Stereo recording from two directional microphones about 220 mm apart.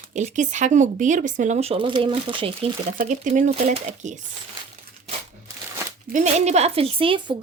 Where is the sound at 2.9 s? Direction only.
35° right (ahead or behind).